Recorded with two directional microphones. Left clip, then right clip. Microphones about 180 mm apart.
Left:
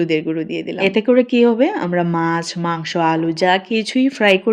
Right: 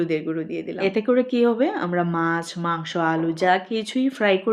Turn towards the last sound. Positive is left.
turn(degrees=35)  # may be behind; listen again after turning